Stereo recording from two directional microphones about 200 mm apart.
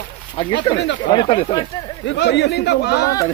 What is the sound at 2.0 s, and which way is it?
Speech, 60° left (ahead or behind).